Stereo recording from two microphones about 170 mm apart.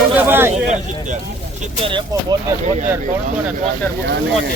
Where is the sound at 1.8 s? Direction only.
30° right (ahead or behind).